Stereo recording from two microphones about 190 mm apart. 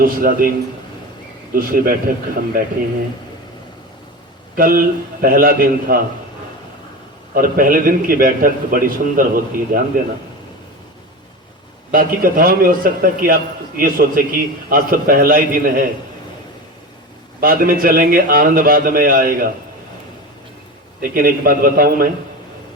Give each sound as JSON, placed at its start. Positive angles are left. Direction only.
{"t": 0.0, "sound": "a man's voice", "side_deg": -50}
{"t": 1.5, "sound": "a man's voice", "side_deg": -50}
{"t": 4.5, "sound": "a man's voice", "side_deg": -50}
{"t": 7.3, "sound": "a man's voice", "side_deg": -50}
{"t": 11.9, "sound": "a man's voice", "side_deg": -50}
{"t": 17.4, "sound": "a man's voice", "side_deg": -50}
{"t": 21.0, "sound": "a man's voice", "side_deg": -50}